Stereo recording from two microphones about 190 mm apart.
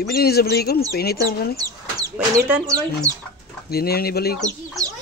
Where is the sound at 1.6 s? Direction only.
20° right (ahead or behind).